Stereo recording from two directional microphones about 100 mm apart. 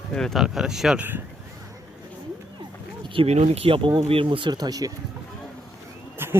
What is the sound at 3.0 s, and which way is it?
Speech, 75° right (ahead or behind).